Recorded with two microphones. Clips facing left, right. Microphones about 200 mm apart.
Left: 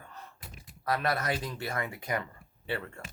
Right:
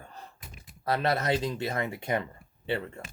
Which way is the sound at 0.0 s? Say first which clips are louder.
Right 2 dB; 30° right (ahead or behind).